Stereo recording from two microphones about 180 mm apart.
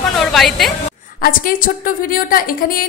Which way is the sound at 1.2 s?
50° left (ahead or behind).